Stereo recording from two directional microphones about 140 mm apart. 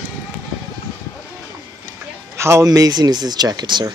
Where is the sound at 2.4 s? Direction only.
20° right (ahead or behind).